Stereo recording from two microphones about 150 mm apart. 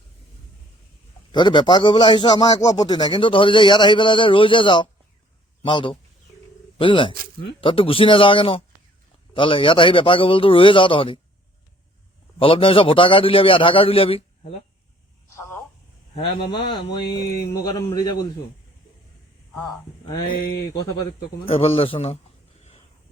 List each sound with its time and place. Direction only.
1.3 s a man's voice: 30° left (ahead or behind)
12.4 s a man's voice: 35° left (ahead or behind)
15.3 s telephone: 20° left (ahead or behind)
16.1 s a man's voice: 30° left (ahead or behind)
19.5 s a man's voice: 20° left (ahead or behind); by 22.2 s 40° left (ahead or behind)